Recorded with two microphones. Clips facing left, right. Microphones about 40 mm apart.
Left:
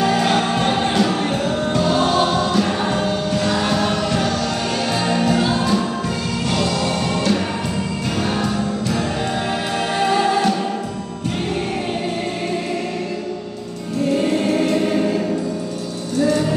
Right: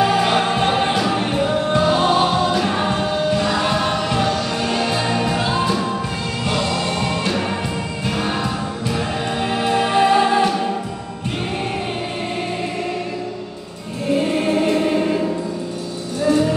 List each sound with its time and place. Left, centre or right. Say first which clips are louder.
0.0 s music: right 1 dB; centre
16.2 s music: right 1 dB; centre